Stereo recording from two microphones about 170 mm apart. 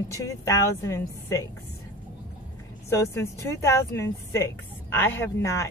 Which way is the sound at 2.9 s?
15° left (ahead or behind).